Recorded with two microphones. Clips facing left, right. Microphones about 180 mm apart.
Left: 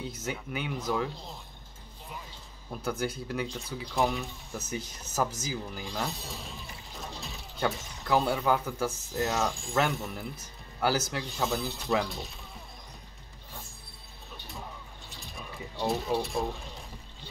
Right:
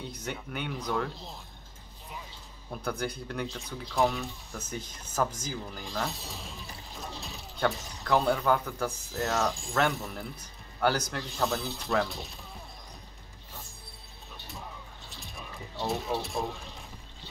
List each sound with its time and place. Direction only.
0.1 s speech: 5° left (ahead or behind)
2.8 s speech: 5° left (ahead or behind)
15.1 s a sound: centre (ahead or behind)
15.9 s speech: centre (ahead or behind)